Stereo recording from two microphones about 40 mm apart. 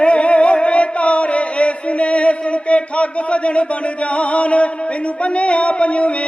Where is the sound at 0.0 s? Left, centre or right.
Left.